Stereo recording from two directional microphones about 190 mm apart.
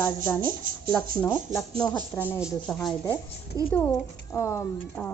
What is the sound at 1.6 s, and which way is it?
Speech, 20° left (ahead or behind).